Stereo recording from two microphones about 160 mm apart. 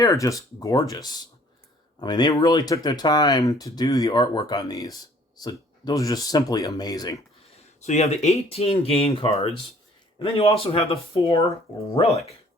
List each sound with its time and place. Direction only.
0.0 s speech: 20° left (ahead or behind)
7.5 s speech: 45° left (ahead or behind)